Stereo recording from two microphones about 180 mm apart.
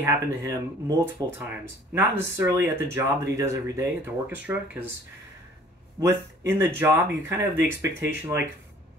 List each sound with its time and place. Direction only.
0.0 s speech: 15° right (ahead or behind)
5.9 s a man's voice: 15° right (ahead or behind)